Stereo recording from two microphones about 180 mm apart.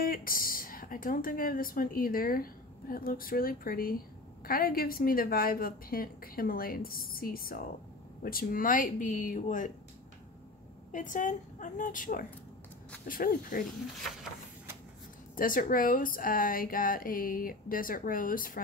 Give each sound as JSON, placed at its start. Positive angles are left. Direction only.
{"t": 0.0, "sound": "speech", "side_deg": 55}
{"t": 10.9, "sound": "speech", "side_deg": 45}
{"t": 15.3, "sound": "speech", "side_deg": 50}